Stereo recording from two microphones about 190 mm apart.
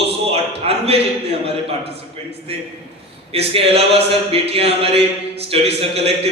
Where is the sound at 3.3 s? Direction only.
30° right (ahead or behind).